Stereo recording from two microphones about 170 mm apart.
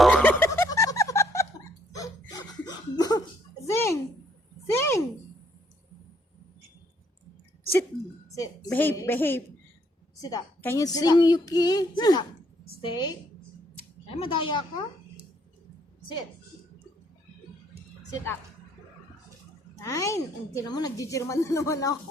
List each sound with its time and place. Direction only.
0.0 s snicker: 10° left (ahead or behind)
1.9 s a sound: 20° left (ahead or behind)
8.4 s a woman's voice: 15° left (ahead or behind)
14.2 s speech: 30° left (ahead or behind)
19.7 s speech: 20° left (ahead or behind)